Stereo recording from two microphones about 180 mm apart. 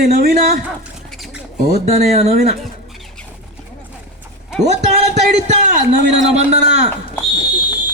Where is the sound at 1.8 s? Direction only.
40° right (ahead or behind).